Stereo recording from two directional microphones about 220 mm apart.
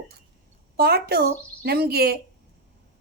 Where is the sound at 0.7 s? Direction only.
45° right (ahead or behind).